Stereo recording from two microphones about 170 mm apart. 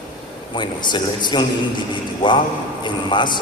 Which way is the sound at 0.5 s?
25° left (ahead or behind).